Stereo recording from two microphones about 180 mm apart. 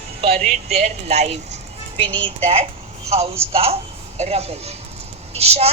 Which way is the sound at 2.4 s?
35° right (ahead or behind).